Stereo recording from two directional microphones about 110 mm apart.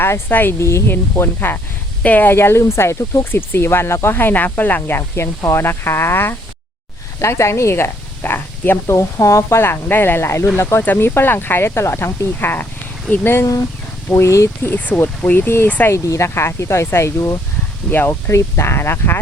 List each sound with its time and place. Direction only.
0.0 s speech: 20° left (ahead or behind)